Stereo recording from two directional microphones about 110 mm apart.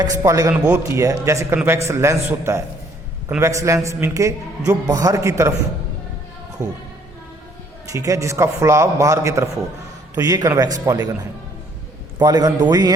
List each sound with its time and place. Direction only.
0.0 s a man's voice: 30° right (ahead or behind)
6.6 s a man's voice: 30° right (ahead or behind)
7.9 s a man's voice: 30° right (ahead or behind)